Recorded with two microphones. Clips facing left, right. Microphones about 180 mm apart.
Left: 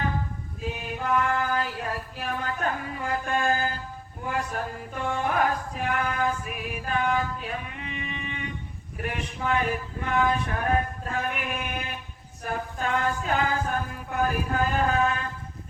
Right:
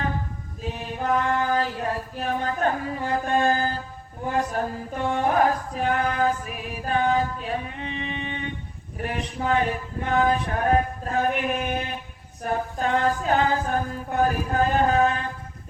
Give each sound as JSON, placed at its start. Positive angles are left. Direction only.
{"t": 0.7, "sound": "mantra", "side_deg": -35}
{"t": 4.3, "sound": "chant", "side_deg": -35}